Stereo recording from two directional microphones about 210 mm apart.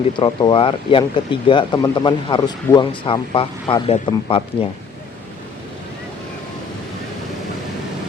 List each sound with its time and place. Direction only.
0.2 s speech: 20° left (ahead or behind)